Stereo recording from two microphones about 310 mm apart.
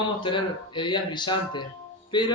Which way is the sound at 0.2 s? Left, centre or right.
Centre.